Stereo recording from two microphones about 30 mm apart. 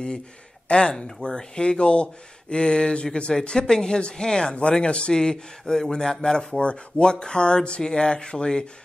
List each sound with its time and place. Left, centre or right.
0.7 s speech: left
1.2 s speech: left
5.2 s speech: left
6.6 s speech: left